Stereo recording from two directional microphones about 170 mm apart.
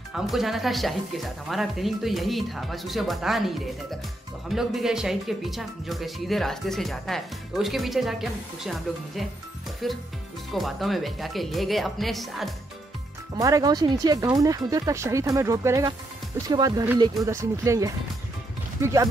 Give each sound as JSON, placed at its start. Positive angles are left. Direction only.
{"t": 0.1, "sound": "speech", "side_deg": 0}
{"t": 13.4, "sound": "speech", "side_deg": -20}